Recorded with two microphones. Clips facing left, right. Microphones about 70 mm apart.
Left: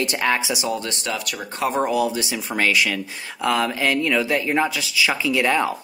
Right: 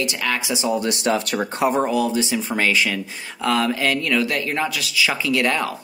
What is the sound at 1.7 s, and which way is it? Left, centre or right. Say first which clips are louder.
Speech: left 3 dB; centre.